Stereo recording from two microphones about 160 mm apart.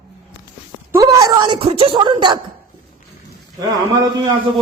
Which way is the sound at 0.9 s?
20° right (ahead or behind).